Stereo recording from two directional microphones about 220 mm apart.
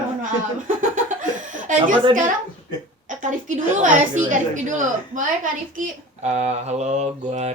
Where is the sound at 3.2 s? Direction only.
35° right (ahead or behind).